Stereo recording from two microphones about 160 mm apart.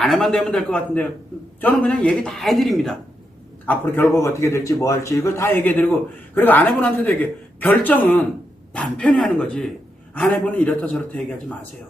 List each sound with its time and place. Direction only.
0.0 s a man's voice: centre (ahead or behind)
3.7 s a man's voice: 15° left (ahead or behind)